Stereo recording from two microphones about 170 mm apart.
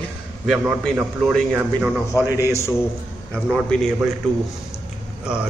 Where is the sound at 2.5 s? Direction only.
15° left (ahead or behind).